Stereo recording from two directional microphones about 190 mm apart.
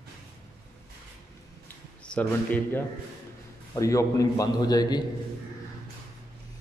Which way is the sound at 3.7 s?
15° left (ahead or behind).